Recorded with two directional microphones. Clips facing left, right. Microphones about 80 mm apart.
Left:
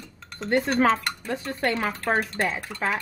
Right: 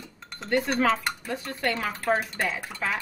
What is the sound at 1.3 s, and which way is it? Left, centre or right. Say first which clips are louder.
Dishes: left 4 dB; left.